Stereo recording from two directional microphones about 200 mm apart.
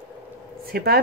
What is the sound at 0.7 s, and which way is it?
Speech, 50° right (ahead or behind).